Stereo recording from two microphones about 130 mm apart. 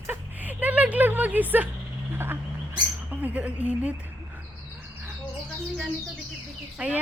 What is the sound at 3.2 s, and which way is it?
Speech, 10° right (ahead or behind).